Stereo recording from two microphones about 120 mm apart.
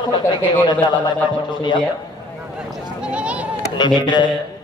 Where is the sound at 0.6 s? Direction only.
40° left (ahead or behind).